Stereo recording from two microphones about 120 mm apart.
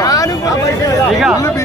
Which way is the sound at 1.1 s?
5° right (ahead or behind).